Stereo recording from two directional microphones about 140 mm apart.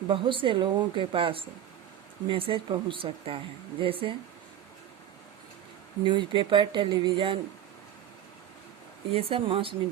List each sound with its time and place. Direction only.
0.1 s speech: 40° right (ahead or behind)
6.1 s speech: 35° right (ahead or behind)
9.1 s speech: 40° right (ahead or behind)